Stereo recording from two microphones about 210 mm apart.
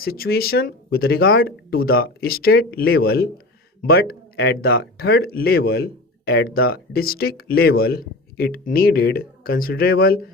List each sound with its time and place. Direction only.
0.0 s speech: 45° left (ahead or behind)